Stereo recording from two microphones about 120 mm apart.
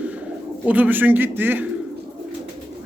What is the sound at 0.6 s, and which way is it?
A man's voice, 15° right (ahead or behind).